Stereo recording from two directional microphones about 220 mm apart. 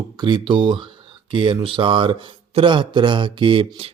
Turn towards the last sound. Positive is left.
turn(degrees=-25)  # may be behind; listen again after turning